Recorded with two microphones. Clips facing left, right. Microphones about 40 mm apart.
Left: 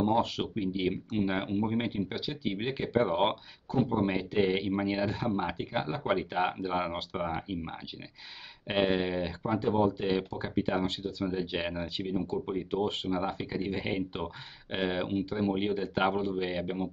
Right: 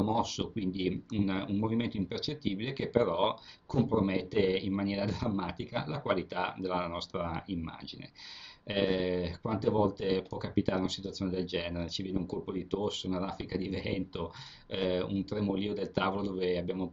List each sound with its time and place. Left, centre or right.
0.0 s speech: left